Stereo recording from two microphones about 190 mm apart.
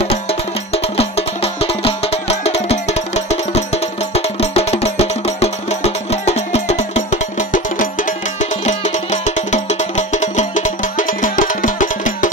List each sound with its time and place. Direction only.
0.0 s music: 30° left (ahead or behind)